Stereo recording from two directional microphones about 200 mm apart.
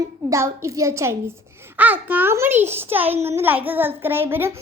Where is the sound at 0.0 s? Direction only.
15° right (ahead or behind).